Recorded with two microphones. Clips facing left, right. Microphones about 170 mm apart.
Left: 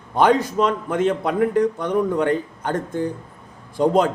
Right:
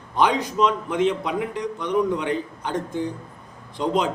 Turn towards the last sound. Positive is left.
turn(degrees=50)  # may be behind; listen again after turning